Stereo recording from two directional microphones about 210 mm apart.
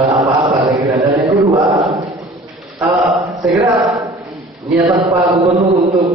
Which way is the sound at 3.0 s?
Centre (ahead or behind).